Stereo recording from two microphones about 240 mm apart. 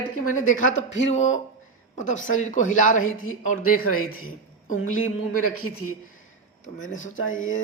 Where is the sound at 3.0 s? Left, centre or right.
Left.